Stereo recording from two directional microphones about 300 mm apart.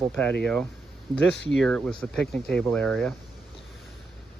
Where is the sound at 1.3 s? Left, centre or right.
Left.